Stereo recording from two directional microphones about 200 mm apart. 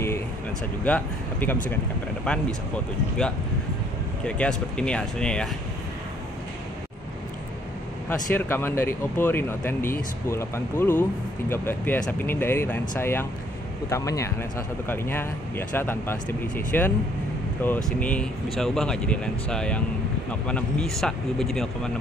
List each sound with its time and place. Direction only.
0.8 s speech: 10° left (ahead or behind)
4.2 s speech: 5° left (ahead or behind)
8.1 s speech: 10° left (ahead or behind)